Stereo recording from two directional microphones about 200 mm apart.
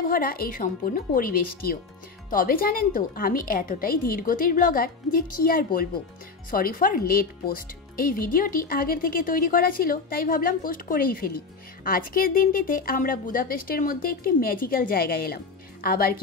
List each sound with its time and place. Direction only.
0.1 s a woman's voice: 45° left (ahead or behind)